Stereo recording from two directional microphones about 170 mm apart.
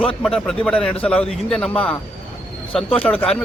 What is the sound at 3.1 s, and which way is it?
Speech, 10° left (ahead or behind).